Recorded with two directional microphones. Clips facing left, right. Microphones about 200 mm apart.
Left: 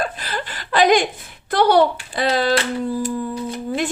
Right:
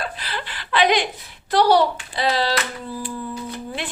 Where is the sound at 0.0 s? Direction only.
45° left (ahead or behind).